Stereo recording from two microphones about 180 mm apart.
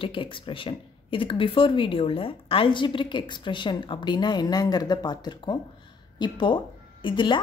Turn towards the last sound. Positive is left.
turn(degrees=25)  # may be behind; listen again after turning